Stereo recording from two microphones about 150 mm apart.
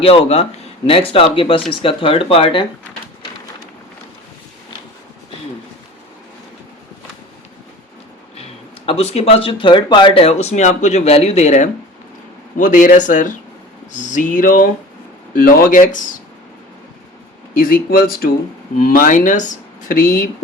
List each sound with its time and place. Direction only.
0.0 s speech: 40° left (ahead or behind)
8.9 s speech: 45° left (ahead or behind); by 16.1 s 60° left (ahead or behind)
17.6 s speech: 70° left (ahead or behind); by 18.3 s 85° left
18.8 s speech: 70° left (ahead or behind)